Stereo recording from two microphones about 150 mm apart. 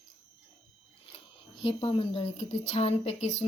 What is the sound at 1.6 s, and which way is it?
A woman's voice, 35° left (ahead or behind).